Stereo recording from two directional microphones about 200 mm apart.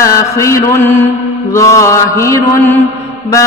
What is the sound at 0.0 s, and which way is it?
Mantra, 15° left (ahead or behind).